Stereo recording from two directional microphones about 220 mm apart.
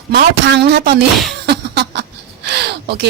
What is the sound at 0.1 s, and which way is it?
Speech, 50° right (ahead or behind).